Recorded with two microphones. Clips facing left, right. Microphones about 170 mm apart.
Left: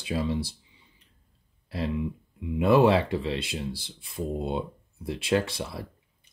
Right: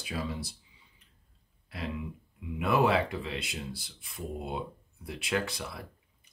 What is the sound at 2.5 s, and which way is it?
Speech, 30° left (ahead or behind).